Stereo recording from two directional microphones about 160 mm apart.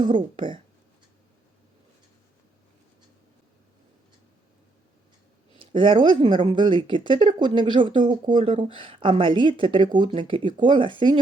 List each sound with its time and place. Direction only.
0.0 s speech: 30° right (ahead or behind)
5.5 s speech: 30° right (ahead or behind)